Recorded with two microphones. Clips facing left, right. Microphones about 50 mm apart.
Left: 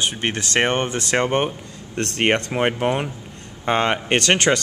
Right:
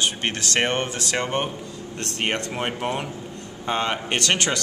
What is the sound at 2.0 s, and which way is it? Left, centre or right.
Speech, left.